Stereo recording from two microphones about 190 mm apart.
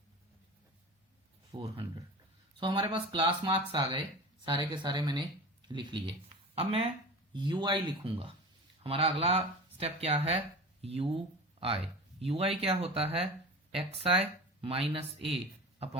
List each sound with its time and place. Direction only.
1.5 s speech: 25° right (ahead or behind)